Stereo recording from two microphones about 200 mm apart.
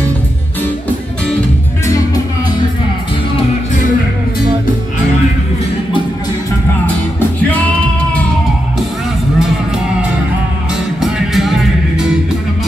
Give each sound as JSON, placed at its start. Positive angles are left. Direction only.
{"t": 7.2, "sound": "music", "side_deg": 5}
{"t": 11.0, "sound": "music", "side_deg": 0}